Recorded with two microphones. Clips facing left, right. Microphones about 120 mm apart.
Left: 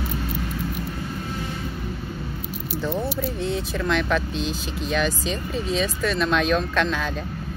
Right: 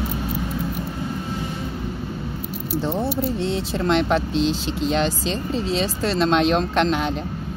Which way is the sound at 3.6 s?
30° right (ahead or behind).